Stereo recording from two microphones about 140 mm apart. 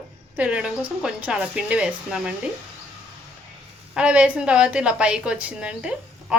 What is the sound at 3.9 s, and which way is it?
A woman's voice, 5° right (ahead or behind).